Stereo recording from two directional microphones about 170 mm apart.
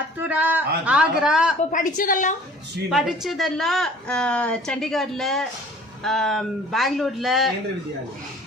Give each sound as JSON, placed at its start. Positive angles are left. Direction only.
{"t": 0.2, "sound": "speech", "side_deg": -10}
{"t": 1.7, "sound": "a woman's voice", "side_deg": 50}
{"t": 2.9, "sound": "a woman's voice", "side_deg": 0}